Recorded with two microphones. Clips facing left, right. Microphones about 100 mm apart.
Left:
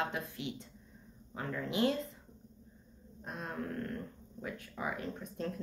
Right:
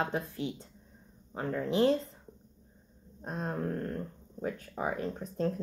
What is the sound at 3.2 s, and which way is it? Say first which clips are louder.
Speech: right 6 dB; 35° right (ahead or behind).